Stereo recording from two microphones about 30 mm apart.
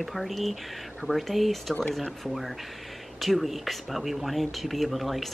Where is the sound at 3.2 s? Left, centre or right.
Centre.